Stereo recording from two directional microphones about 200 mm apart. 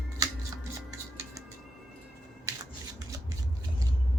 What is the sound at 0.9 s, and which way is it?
Music, 15° right (ahead or behind).